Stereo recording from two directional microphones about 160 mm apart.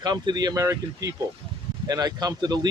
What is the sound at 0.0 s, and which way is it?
Speech, 25° right (ahead or behind).